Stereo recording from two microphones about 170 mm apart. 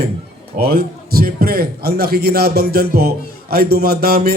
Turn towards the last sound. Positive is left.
turn(degrees=-65)  # may be behind; listen again after turning